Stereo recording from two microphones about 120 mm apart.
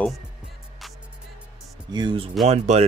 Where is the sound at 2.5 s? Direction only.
65° right (ahead or behind).